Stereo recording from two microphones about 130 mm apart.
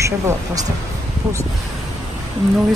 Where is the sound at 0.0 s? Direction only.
20° right (ahead or behind).